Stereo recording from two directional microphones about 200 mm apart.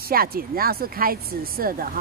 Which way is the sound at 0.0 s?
50° right (ahead or behind).